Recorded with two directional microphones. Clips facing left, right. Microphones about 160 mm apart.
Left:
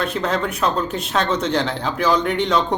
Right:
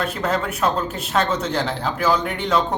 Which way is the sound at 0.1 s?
5° right (ahead or behind).